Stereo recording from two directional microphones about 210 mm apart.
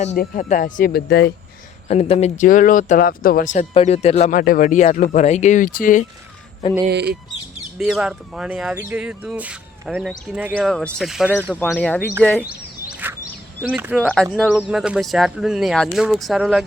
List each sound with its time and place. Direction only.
0.2 s speech: 35° left (ahead or behind)
1.9 s speech: 30° left (ahead or behind)
6.8 s speech: 50° right (ahead or behind)
7.8 s speech: centre (ahead or behind)
11.6 s speech: 5° left (ahead or behind)
13.0 s a sound: 10° right (ahead or behind)
13.6 s speech: 10° right (ahead or behind)